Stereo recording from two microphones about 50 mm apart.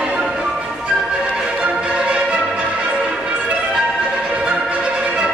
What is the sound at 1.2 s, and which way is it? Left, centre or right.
Music, centre.